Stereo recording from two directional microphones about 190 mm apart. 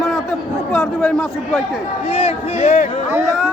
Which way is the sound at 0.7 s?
Centre (ahead or behind).